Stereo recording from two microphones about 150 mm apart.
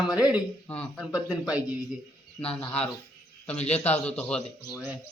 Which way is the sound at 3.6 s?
45° left (ahead or behind).